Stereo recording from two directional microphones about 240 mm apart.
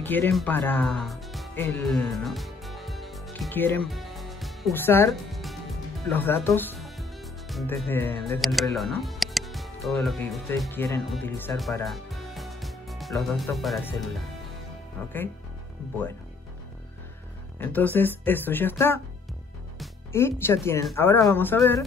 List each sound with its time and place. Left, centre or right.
0.0 s speech: centre
11.8 s music: centre
13.6 s speech: centre
17.6 s speech: centre
20.1 s speech: centre